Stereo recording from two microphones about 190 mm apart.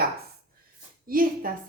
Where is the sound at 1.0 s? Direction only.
50° right (ahead or behind).